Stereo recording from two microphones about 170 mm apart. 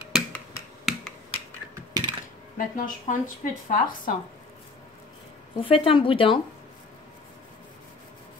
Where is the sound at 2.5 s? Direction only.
55° left (ahead or behind).